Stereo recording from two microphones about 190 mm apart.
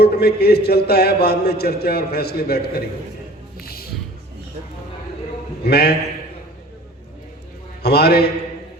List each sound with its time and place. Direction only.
0.0 s a man's voice: 55° left (ahead or behind)
3.6 s music: 55° left (ahead or behind)
5.6 s a man's voice: 55° left (ahead or behind)
7.8 s a man's voice: 55° left (ahead or behind)